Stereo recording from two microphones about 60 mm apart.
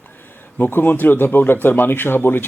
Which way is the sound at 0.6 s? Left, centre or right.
Left.